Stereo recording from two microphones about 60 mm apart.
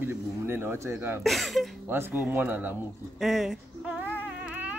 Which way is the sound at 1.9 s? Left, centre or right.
Right.